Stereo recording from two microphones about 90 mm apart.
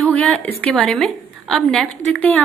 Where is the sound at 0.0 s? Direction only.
15° left (ahead or behind).